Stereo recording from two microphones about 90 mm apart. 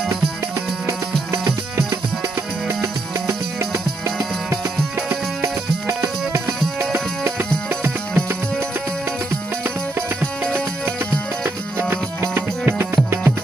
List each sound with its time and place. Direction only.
1.3 s music: 30° right (ahead or behind)
10.2 s music: 10° left (ahead or behind)
11.9 s music: 25° right (ahead or behind)